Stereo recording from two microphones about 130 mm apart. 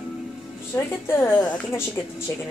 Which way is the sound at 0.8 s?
25° left (ahead or behind).